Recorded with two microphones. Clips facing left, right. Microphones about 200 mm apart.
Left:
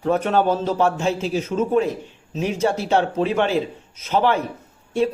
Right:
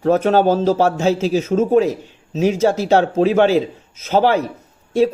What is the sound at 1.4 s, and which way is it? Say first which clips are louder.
Speech: right 4 dB; 40° right (ahead or behind).